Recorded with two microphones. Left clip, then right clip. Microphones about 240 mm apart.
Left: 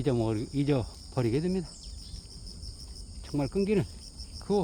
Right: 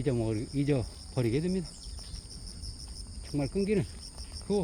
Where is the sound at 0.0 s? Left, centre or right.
Centre.